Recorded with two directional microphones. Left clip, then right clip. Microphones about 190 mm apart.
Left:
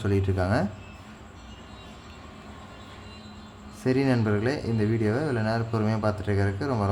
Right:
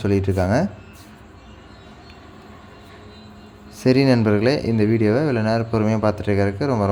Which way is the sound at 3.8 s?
35° right (ahead or behind).